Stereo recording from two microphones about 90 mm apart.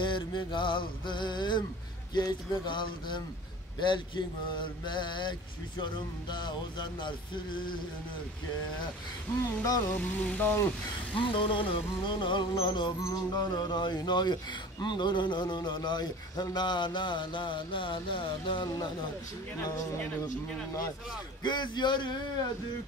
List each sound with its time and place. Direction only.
0.0 s speech: 60° left (ahead or behind)
4.6 s speech: 60° left (ahead or behind)
9.8 s speech: 20° left (ahead or behind)
11.1 s speech: 70° left (ahead or behind)
13.0 s speech: 45° left (ahead or behind); by 18.7 s 70° left (ahead or behind)
21.4 s speech: 55° left (ahead or behind)